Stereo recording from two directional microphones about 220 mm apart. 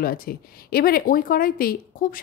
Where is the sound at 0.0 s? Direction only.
40° left (ahead or behind).